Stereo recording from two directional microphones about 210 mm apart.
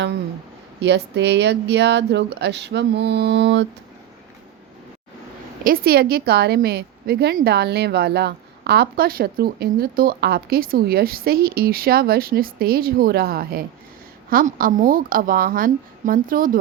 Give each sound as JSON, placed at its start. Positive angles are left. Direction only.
{"t": 0.8, "sound": "speech", "side_deg": -55}
{"t": 5.6, "sound": "a woman's voice", "side_deg": -45}